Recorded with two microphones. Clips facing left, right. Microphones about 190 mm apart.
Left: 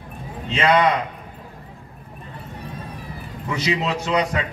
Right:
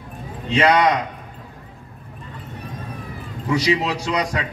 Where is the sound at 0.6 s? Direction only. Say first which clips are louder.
Right 1 dB; 40° right (ahead or behind).